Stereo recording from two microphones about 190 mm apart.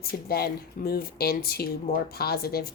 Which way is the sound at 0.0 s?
55° left (ahead or behind).